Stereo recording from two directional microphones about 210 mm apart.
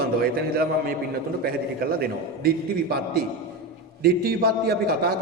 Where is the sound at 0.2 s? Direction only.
45° right (ahead or behind).